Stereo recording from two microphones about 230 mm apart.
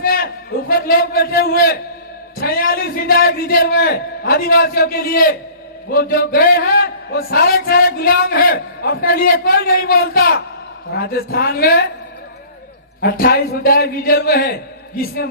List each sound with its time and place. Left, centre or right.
0.0 s a sound: left
0.7 s a man's voice: left
13.0 s a man's voice: left